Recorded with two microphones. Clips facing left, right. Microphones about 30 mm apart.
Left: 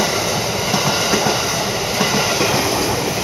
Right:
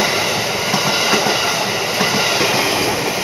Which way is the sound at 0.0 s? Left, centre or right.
Right.